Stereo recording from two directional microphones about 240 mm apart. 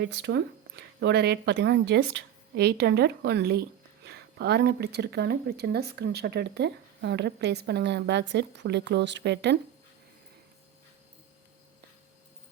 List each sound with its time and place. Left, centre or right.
0.0 s speech: right